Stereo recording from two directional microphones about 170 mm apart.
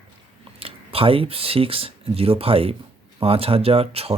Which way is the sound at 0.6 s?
35° right (ahead or behind).